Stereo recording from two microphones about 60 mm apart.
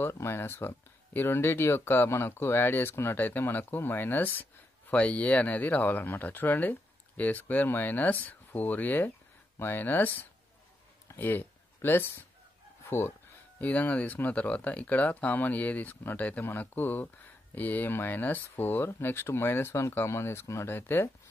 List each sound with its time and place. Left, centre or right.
0.1 s speech: left
4.9 s speech: left
13.6 s speech: left